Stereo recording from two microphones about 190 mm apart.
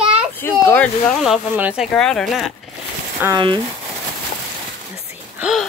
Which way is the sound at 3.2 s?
20° right (ahead or behind).